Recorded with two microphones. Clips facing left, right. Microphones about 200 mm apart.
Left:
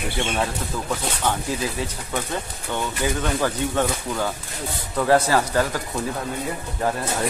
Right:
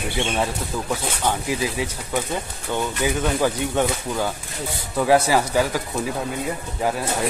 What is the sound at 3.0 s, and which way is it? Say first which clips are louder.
Speech: right 2 dB; 15° right (ahead or behind).